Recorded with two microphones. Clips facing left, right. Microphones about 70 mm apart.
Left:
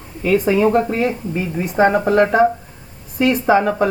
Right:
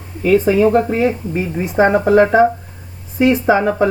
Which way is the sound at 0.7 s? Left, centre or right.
Centre.